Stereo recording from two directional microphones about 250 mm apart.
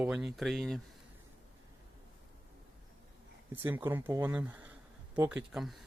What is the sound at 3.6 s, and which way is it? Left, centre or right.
Speech, centre.